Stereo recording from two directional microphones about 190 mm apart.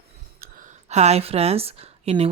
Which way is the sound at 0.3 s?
50° right (ahead or behind).